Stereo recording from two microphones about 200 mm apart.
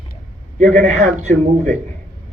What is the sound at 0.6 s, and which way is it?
A man's voice, 35° right (ahead or behind).